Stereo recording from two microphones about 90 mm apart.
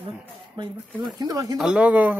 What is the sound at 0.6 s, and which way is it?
Speech, 50° right (ahead or behind).